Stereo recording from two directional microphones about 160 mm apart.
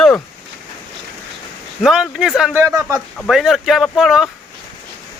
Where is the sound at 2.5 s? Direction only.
20° right (ahead or behind).